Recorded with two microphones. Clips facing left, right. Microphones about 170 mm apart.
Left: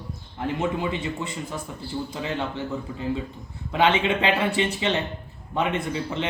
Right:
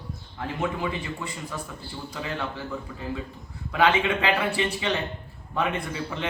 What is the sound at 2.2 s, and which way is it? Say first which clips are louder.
Speech: left 1 dB; 20° left (ahead or behind).